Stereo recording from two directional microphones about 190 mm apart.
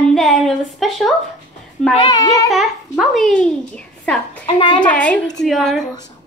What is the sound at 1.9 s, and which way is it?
Speech, 25° left (ahead or behind).